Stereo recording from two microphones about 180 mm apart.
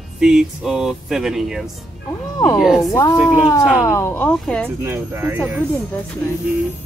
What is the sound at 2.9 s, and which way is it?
Speech, 20° left (ahead or behind).